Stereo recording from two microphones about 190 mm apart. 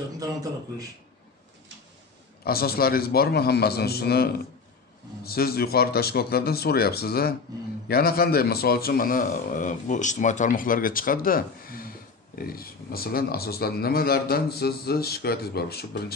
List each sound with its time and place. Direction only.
0.2 s a man's voice: 20° right (ahead or behind)
2.4 s a man's voice: 55° left (ahead or behind)